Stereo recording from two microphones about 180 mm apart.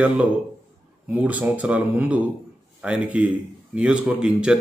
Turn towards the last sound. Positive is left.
turn(degrees=-5)  # may be behind; listen again after turning